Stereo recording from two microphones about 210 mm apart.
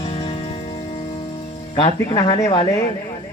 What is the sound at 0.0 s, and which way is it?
Music, 25° left (ahead or behind).